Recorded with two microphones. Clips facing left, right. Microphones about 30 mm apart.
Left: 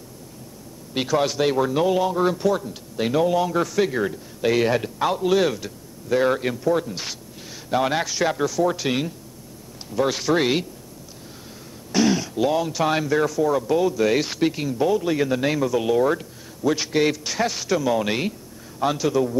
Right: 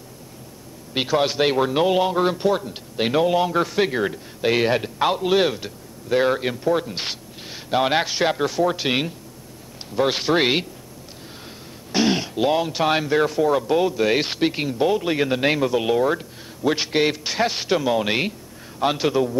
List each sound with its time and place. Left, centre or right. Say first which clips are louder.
0.9 s a man's voice: right 1 dB; right
11.9 s speech: even; right
16.0 s speech: even; centre
16.6 s speech: even; right
17.8 s a man's voice: right 1 dB; right
18.8 s speech: right 1 dB; right